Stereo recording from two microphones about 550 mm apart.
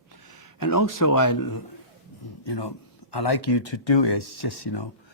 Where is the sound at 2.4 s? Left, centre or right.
Left.